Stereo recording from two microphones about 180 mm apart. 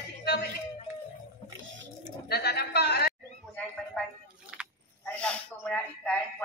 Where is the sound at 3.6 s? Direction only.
10° left (ahead or behind).